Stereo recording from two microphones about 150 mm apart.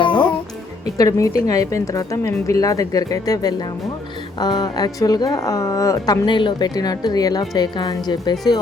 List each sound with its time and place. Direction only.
0.0 s music: 35° left (ahead or behind)
0.9 s a woman's voice: 20° left (ahead or behind)